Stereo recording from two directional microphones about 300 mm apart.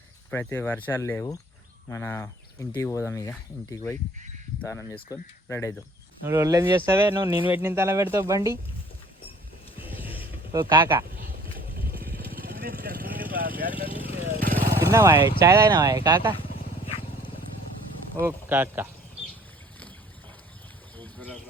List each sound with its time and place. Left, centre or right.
0.3 s speech: centre
6.2 s speech: centre
9.7 s a sound: centre
10.5 s speech: centre
11.1 s a sound: right
11.7 s vehicle: right
13.8 s vehicle: centre
14.8 s speech: centre
16.3 s motorcycle: centre
18.3 s speech: centre
20.9 s a sound: centre